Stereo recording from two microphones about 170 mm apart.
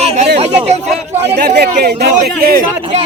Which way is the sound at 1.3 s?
75° right (ahead or behind).